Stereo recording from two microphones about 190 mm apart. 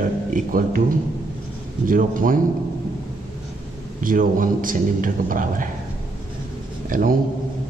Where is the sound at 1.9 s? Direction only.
45° right (ahead or behind).